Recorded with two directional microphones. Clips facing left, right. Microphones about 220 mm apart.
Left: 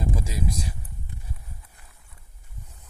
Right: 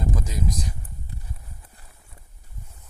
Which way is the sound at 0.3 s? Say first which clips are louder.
Right 1 dB; 25° left (ahead or behind).